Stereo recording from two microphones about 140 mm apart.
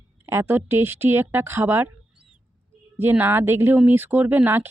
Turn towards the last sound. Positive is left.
turn(degrees=-15)  # may be behind; listen again after turning